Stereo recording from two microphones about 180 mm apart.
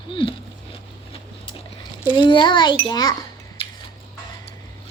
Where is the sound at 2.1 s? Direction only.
25° left (ahead or behind).